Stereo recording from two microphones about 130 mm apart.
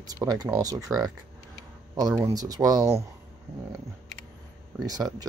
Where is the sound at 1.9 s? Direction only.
25° right (ahead or behind).